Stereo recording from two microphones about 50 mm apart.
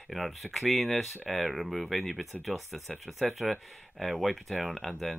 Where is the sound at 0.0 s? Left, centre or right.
Centre.